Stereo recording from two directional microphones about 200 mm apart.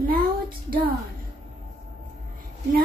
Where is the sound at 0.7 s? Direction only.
45° right (ahead or behind).